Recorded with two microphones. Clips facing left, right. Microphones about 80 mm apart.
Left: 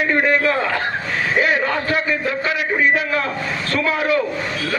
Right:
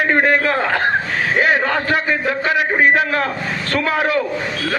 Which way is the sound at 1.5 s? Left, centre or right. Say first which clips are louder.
Right 2 dB; right.